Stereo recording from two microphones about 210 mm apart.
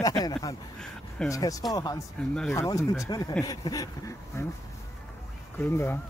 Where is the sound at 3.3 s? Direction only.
15° left (ahead or behind).